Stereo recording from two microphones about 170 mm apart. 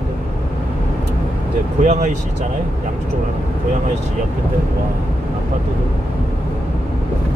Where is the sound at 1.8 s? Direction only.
45° right (ahead or behind).